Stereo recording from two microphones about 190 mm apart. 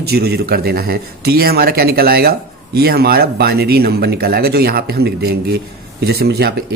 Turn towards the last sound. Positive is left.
turn(degrees=-55)  # may be behind; listen again after turning